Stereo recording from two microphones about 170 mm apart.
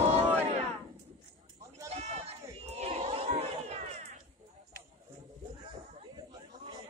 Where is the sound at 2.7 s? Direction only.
35° right (ahead or behind).